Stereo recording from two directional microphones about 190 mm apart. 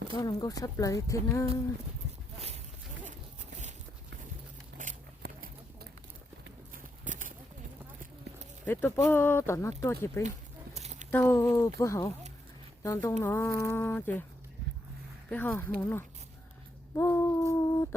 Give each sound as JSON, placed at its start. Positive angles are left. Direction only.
{"t": 0.2, "sound": "speech", "side_deg": 20}
{"t": 5.2, "sound": "clip-clop", "side_deg": -55}
{"t": 7.0, "sound": "clip-clop", "side_deg": -45}
{"t": 8.6, "sound": "speech", "side_deg": 10}
{"t": 10.8, "sound": "a sound", "side_deg": -35}
{"t": 11.1, "sound": "speech", "side_deg": 10}
{"t": 15.3, "sound": "speech", "side_deg": 10}
{"t": 16.9, "sound": "a sound", "side_deg": 15}